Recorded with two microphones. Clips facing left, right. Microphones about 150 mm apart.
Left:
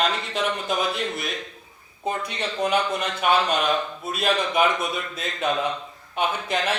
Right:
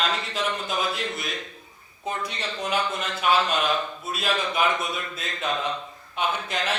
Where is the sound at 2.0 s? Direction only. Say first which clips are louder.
Left 3 dB; 55° left (ahead or behind).